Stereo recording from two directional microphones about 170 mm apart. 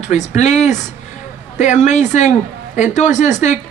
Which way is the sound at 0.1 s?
45° left (ahead or behind).